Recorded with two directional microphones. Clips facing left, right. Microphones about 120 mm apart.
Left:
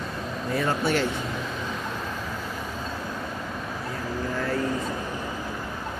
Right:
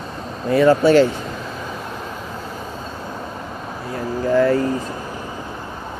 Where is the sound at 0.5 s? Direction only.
90° right.